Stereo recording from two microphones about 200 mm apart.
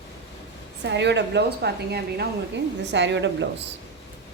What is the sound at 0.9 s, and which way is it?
A woman's voice, 60° right (ahead or behind).